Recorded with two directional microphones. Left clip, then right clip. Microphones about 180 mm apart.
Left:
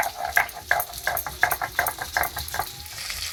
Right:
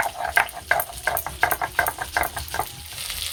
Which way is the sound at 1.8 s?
5° right (ahead or behind).